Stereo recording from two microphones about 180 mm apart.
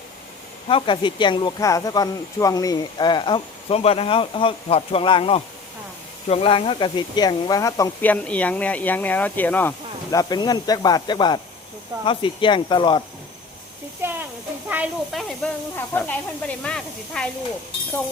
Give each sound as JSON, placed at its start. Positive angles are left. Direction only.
{"t": 0.7, "sound": "speech", "side_deg": 30}
{"t": 8.1, "sound": "speech", "side_deg": 10}
{"t": 14.0, "sound": "speech", "side_deg": -10}
{"t": 15.7, "sound": "speech", "side_deg": 10}